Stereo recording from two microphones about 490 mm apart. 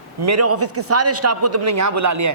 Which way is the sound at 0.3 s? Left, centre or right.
Right.